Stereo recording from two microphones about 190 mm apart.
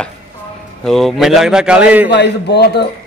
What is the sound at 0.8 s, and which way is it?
A man's voice, centre (ahead or behind).